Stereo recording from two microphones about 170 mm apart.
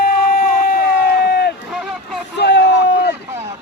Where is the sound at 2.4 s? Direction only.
85° left.